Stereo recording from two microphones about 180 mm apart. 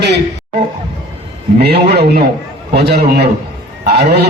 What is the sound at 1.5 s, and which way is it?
A man's voice, 65° right (ahead or behind).